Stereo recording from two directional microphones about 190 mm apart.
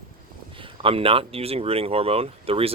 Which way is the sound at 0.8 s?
30° right (ahead or behind).